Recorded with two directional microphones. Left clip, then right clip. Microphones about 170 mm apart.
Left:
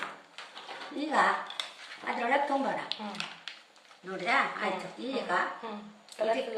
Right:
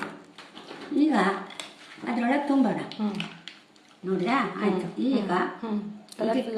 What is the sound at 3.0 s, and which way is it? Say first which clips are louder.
A woman's voice: right 4 dB; 10° right (ahead or behind).